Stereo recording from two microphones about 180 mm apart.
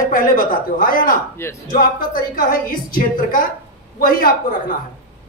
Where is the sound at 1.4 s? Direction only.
15° left (ahead or behind).